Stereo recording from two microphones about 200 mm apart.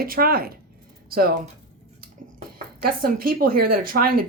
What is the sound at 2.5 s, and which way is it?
Speech, 45° right (ahead or behind).